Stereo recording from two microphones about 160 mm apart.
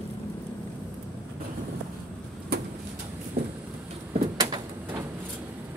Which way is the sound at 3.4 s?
75° right (ahead or behind).